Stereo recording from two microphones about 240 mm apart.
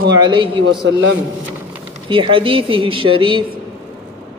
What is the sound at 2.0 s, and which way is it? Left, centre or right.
Speech, right.